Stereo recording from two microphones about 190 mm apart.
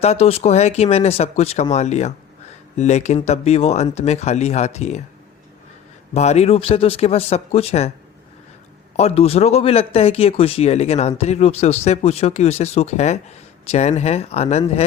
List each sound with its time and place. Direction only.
0.0 s speech: 35° left (ahead or behind)
6.1 s speech: 35° left (ahead or behind)
9.0 s speech: 35° left (ahead or behind)